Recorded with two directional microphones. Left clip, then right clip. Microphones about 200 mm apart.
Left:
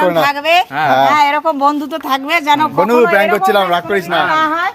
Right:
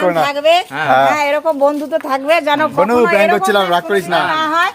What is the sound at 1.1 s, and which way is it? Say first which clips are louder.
Speech: left 3 dB; 55° left (ahead or behind).